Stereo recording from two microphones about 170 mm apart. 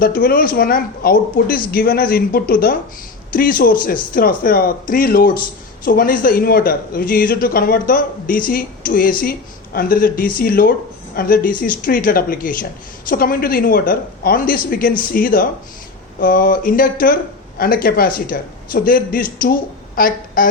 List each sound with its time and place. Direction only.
0.0 s a man's voice: 60° left (ahead or behind)